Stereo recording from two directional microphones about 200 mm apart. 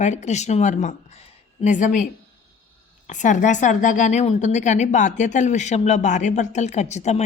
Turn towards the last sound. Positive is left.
turn(degrees=35)  # may be behind; listen again after turning